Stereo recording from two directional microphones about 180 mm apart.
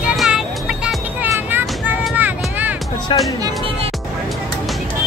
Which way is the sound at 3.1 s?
25° left (ahead or behind).